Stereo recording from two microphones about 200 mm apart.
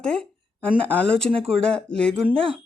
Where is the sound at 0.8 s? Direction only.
5° left (ahead or behind).